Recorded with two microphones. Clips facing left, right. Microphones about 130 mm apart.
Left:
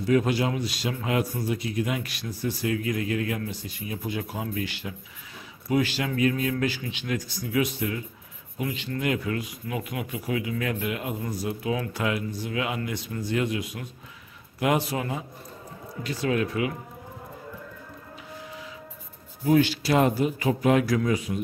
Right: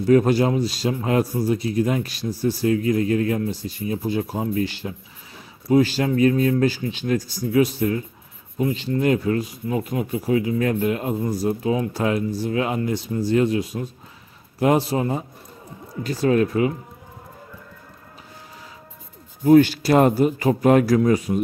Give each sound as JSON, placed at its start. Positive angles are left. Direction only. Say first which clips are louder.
{"t": 0.0, "sound": "speech", "louder": "right 7 dB", "side_deg": -40}
{"t": 19.4, "sound": "a man's voice", "louder": "right 8 dB", "side_deg": -45}